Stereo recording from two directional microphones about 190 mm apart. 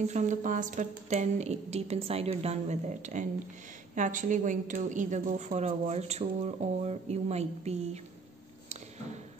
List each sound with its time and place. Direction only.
0.0 s a woman's voice: 35° right (ahead or behind)